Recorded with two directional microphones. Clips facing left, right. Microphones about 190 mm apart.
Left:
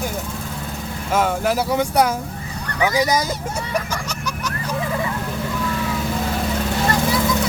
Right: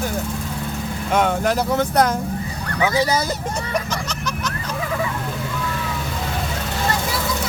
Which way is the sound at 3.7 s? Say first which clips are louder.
Even; 10° left (ahead or behind).